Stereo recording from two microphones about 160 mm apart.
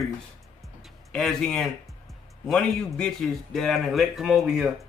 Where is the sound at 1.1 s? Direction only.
5° left (ahead or behind).